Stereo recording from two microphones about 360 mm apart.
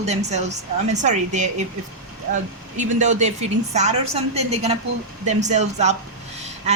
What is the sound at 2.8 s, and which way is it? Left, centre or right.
Speech, centre.